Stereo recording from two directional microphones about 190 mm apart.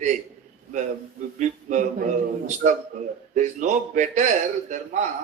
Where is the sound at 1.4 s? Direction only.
40° right (ahead or behind).